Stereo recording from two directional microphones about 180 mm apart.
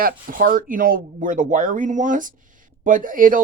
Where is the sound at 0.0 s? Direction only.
50° right (ahead or behind).